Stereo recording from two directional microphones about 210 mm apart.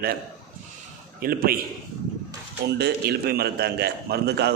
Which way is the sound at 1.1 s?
45° right (ahead or behind).